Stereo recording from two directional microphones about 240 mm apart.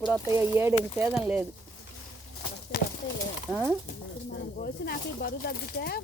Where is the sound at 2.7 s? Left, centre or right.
Left.